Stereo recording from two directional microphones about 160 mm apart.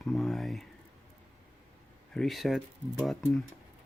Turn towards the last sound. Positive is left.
turn(degrees=0)  # may be behind; listen again after turning